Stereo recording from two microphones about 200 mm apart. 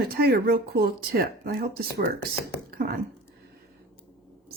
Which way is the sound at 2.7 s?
45° right (ahead or behind).